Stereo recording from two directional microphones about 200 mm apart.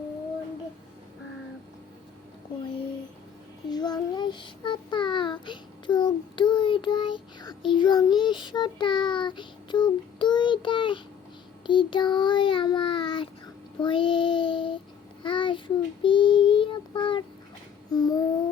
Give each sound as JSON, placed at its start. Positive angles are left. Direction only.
{"t": 3.7, "sound": "child singing", "side_deg": 20}